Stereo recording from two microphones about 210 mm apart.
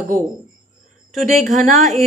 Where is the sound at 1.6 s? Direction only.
Centre (ahead or behind).